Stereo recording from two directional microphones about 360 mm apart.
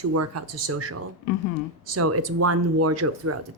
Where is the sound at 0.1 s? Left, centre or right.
Right.